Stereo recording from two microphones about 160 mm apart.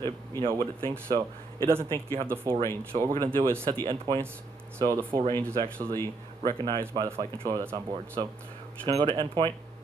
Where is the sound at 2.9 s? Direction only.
40° right (ahead or behind); by 5.2 s 20° right (ahead or behind).